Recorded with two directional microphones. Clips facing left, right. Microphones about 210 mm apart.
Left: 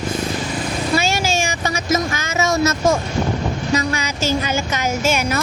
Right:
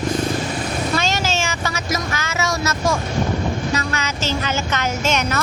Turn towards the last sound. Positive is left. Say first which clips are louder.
# left 2 dB
turn(degrees=10)  # may be behind; listen again after turning